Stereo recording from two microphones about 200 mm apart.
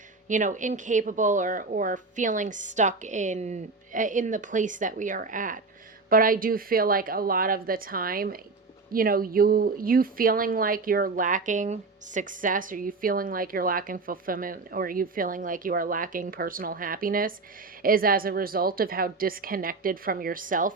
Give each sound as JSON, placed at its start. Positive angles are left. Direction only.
{"t": 0.3, "sound": "speech", "side_deg": -40}